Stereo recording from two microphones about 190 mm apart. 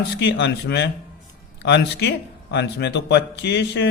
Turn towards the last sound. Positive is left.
turn(degrees=65)  # may be behind; listen again after turning